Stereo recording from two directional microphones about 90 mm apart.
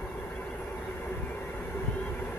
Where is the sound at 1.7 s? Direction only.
20° left (ahead or behind).